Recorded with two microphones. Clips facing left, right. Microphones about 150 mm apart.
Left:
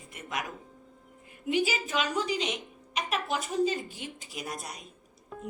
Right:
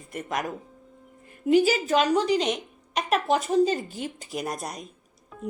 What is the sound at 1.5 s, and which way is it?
A woman's voice, 40° right (ahead or behind).